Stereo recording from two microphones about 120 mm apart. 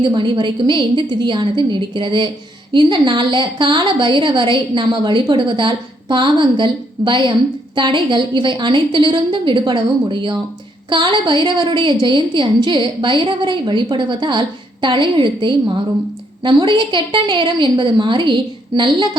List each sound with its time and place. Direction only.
0.0 s a woman's voice: 40° right (ahead or behind)